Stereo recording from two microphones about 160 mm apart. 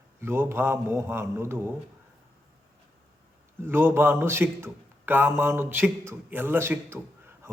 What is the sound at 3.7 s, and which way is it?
A man's voice, 15° right (ahead or behind).